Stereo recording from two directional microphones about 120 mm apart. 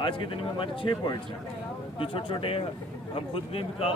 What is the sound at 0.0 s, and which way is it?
A man's voice, 45° left (ahead or behind).